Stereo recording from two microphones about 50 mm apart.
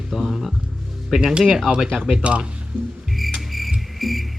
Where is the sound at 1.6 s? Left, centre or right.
Centre.